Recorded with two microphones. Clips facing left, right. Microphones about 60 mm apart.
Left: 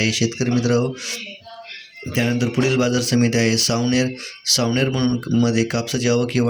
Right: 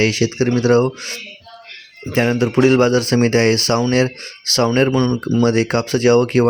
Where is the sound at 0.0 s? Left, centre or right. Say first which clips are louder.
Right 4 dB; right.